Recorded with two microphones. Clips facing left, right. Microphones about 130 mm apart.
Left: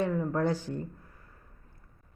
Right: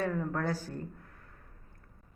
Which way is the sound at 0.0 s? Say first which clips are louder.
Left 4 dB; 20° left (ahead or behind).